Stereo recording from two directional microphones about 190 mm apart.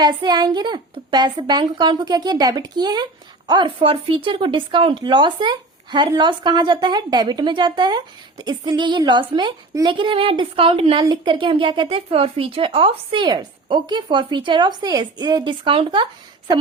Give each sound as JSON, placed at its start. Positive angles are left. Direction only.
{"t": 0.0, "sound": "a child's voice", "side_deg": -25}